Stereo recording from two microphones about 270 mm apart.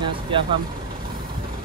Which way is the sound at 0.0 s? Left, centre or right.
Centre.